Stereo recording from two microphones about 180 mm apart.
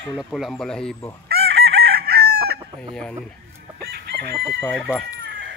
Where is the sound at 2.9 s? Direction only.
5° left (ahead or behind).